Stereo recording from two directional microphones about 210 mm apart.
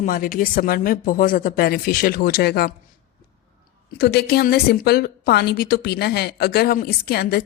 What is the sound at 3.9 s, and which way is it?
A woman's voice, 50° left (ahead or behind).